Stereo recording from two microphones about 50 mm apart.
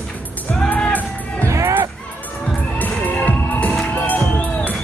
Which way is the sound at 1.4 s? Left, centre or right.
Right.